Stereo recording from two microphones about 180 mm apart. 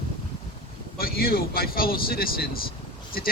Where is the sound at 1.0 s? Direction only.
55° left (ahead or behind).